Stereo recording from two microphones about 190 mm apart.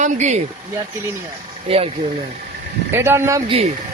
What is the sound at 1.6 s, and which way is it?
Speech, 30° right (ahead or behind).